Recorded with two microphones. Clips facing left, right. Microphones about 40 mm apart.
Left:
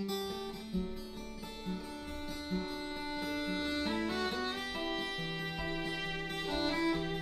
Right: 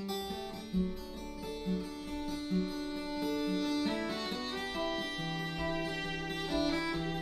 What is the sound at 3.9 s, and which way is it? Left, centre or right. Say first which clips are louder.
Music: left 1 dB; centre.